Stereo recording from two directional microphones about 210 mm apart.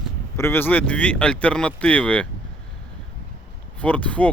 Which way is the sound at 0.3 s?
10° left (ahead or behind).